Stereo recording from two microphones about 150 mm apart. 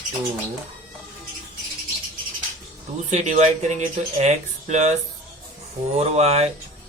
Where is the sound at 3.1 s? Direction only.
50° right (ahead or behind).